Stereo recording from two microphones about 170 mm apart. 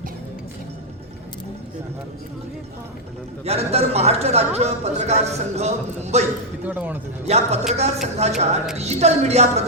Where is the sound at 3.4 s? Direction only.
40° right (ahead or behind).